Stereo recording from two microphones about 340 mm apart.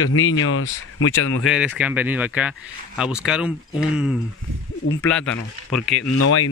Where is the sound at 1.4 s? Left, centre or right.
Centre.